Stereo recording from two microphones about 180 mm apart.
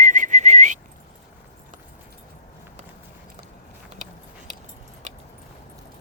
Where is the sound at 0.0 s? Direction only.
45° right (ahead or behind).